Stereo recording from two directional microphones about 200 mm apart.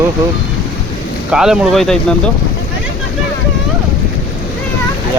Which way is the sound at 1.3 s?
5° right (ahead or behind).